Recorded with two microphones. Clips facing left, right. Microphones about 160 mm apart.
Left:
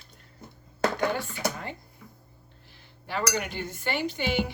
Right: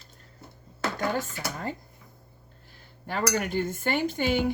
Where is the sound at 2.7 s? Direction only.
45° right (ahead or behind).